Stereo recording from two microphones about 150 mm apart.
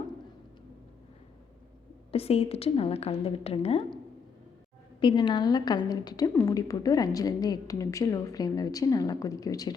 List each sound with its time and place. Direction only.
2.1 s a woman's voice: 40° left (ahead or behind)
4.9 s a woman's voice: 35° left (ahead or behind)